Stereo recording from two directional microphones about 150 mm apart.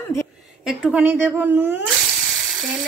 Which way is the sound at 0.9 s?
10° right (ahead or behind).